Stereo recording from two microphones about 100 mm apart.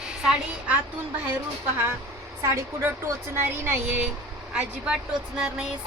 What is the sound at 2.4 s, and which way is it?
A woman's voice, 25° right (ahead or behind).